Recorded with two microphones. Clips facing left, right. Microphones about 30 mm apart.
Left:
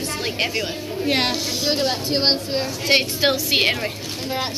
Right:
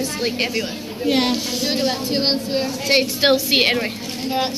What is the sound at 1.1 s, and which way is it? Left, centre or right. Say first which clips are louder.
A woman's voice: right 3 dB; left.